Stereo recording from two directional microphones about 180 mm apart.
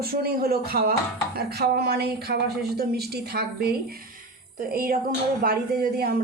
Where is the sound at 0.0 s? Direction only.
60° right (ahead or behind).